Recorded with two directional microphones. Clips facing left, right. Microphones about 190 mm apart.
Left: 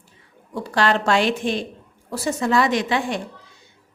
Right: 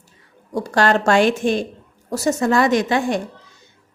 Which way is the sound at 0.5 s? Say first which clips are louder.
Right 3 dB; 45° right (ahead or behind).